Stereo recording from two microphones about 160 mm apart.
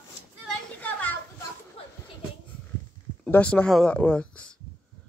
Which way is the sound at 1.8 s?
40° left (ahead or behind).